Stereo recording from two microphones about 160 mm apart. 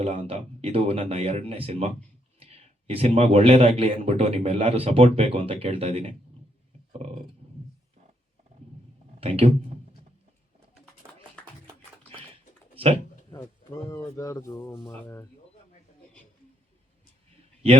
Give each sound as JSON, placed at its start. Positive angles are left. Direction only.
{"t": 0.0, "sound": "speech", "side_deg": -40}
{"t": 7.4, "sound": "wild animals", "side_deg": -40}
{"t": 9.2, "sound": "speech", "side_deg": -35}
{"t": 11.0, "sound": "music", "side_deg": -20}
{"t": 13.3, "sound": "speech", "side_deg": 20}